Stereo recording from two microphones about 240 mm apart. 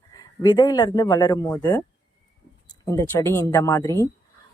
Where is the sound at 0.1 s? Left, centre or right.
Centre.